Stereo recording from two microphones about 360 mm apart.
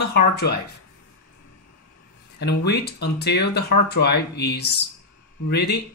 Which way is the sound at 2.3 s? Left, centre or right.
Left.